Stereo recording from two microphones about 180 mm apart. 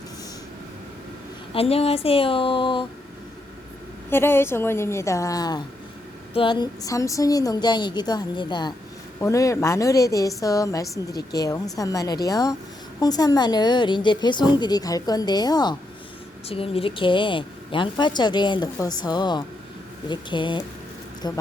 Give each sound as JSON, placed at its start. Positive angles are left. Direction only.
{"t": 1.5, "sound": "speech", "side_deg": 35}
{"t": 4.1, "sound": "a woman's voice", "side_deg": 15}